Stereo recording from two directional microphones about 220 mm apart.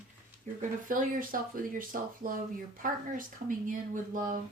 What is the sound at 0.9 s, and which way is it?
Speech, 40° right (ahead or behind).